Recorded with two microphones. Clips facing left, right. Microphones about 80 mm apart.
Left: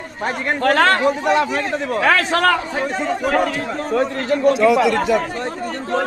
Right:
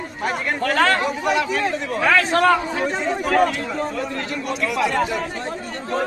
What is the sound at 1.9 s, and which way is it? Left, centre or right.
Speech, left.